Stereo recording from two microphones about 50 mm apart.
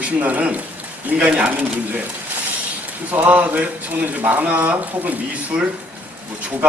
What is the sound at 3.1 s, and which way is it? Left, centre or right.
Speech, right.